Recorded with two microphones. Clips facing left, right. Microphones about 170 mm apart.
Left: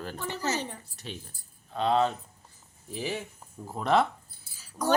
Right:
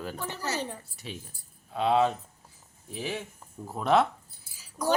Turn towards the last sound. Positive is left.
turn(degrees=-10)  # may be behind; listen again after turning